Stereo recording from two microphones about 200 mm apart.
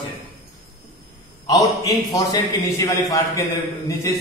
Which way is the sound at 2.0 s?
15° left (ahead or behind).